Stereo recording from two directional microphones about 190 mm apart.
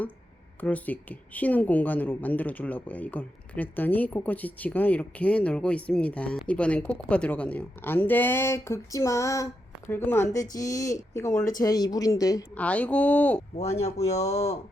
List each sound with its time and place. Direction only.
0.6 s a woman's voice: 10° left (ahead or behind)
12.5 s speech: 5° left (ahead or behind)
13.6 s speech: 35° left (ahead or behind)